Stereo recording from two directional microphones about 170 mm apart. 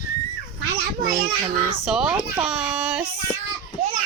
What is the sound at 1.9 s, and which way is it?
Speech, 5° right (ahead or behind).